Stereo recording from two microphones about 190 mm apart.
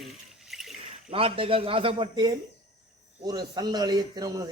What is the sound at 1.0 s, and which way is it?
A man's voice, 30° right (ahead or behind).